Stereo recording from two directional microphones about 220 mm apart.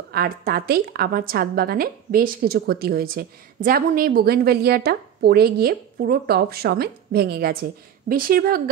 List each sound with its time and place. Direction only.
0.1 s a woman's voice: 45° right (ahead or behind)